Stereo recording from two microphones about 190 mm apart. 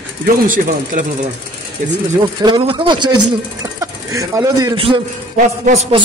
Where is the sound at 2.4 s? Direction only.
25° right (ahead or behind).